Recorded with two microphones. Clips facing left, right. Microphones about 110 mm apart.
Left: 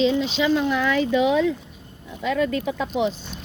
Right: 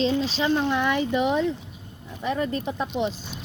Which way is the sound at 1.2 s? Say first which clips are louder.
Left 3 dB; 90° left.